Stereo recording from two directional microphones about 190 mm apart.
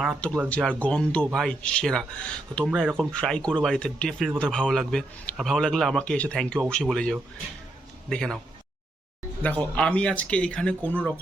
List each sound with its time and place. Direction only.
0.0 s speech: centre (ahead or behind)
9.4 s speech: 5° left (ahead or behind)